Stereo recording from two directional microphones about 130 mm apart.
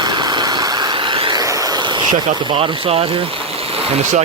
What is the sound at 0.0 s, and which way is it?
Vehicle, 35° right (ahead or behind).